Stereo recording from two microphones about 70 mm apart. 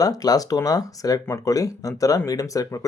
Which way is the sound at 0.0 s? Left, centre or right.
Left.